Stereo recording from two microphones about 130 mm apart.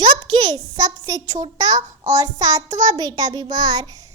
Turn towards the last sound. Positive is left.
turn(degrees=-30)  # may be behind; listen again after turning